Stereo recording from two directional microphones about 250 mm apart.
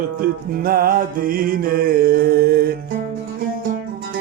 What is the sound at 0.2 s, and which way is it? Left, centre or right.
Music, right.